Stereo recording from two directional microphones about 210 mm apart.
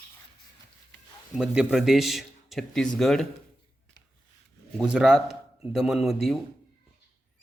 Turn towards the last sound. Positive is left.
turn(degrees=0)  # may be behind; listen again after turning